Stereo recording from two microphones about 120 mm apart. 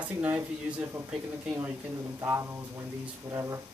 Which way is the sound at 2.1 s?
20° right (ahead or behind).